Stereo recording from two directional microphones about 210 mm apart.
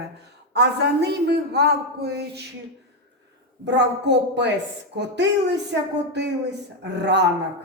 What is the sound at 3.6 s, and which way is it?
A woman's voice, 55° right (ahead or behind).